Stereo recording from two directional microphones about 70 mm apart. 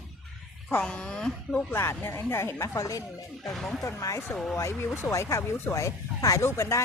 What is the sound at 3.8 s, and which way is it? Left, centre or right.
Speech, left.